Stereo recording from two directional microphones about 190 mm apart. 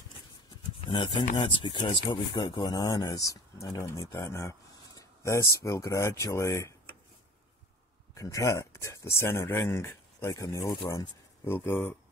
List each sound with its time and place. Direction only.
0.7 s speech: 25° left (ahead or behind)
8.1 s speech: 15° left (ahead or behind)